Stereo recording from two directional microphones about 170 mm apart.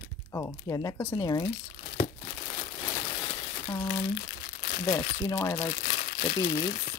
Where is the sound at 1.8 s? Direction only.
50° left (ahead or behind).